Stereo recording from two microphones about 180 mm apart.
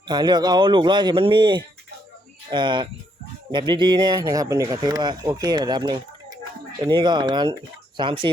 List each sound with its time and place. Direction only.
0.1 s speech: 25° right (ahead or behind)